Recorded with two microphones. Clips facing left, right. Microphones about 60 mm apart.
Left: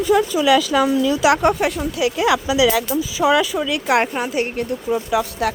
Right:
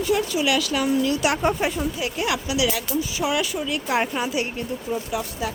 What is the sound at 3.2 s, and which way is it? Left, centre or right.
Speech, left.